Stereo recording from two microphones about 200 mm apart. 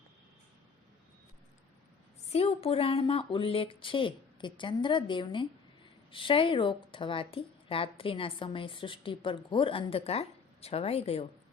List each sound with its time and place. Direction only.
2.3 s speech: 30° left (ahead or behind)